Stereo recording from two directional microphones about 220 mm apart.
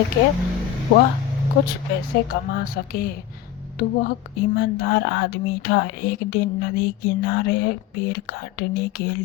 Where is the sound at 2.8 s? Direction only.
45° left (ahead or behind).